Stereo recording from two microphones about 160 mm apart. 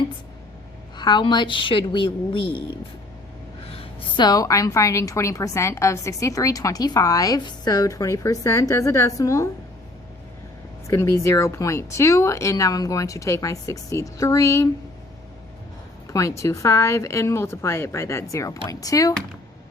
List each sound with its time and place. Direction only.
0.9 s a woman's voice: 30° left (ahead or behind)
3.7 s a sound: 35° left (ahead or behind)
4.3 s a woman's voice: 20° left (ahead or behind)
10.8 s a woman's voice: 20° left (ahead or behind)
16.1 s a woman's voice: 20° left (ahead or behind)